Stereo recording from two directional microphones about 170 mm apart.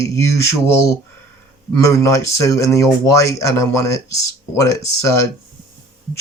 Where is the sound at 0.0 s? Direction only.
15° left (ahead or behind).